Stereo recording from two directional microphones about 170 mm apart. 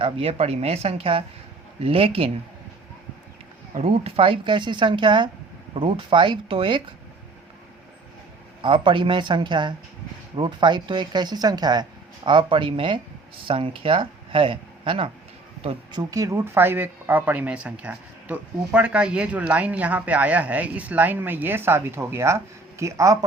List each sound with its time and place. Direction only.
0.0 s speech: 35° right (ahead or behind)
3.8 s speech: 35° right (ahead or behind)
8.6 s speech: 30° right (ahead or behind)